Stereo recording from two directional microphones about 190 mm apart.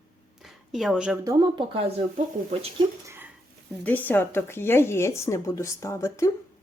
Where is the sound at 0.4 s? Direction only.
Centre (ahead or behind).